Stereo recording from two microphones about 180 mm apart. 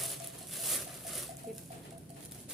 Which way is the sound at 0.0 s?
Centre (ahead or behind).